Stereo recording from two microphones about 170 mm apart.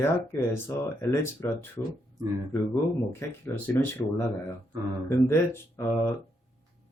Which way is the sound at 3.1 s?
10° left (ahead or behind).